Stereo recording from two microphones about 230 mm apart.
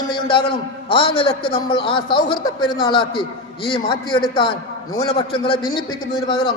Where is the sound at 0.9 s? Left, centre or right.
Left.